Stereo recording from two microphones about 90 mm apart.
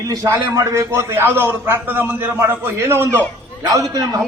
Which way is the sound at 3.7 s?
45° right (ahead or behind).